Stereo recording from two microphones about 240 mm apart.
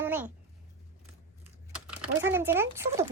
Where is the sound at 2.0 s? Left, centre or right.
Centre.